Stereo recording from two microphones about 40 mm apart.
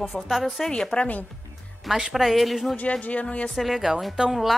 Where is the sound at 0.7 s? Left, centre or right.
Left.